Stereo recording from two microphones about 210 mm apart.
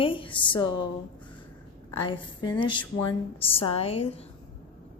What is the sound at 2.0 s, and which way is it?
A woman's voice, 20° left (ahead or behind).